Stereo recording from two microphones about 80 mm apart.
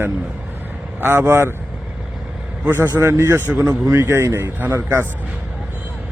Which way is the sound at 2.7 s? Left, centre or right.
Right.